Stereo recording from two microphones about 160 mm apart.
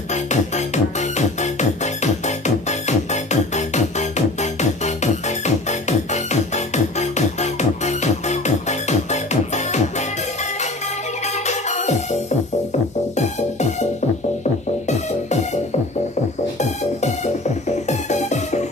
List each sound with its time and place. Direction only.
0.1 s music: 45° left (ahead or behind)
11.4 s music: 45° left (ahead or behind)
16.5 s music: 45° left (ahead or behind)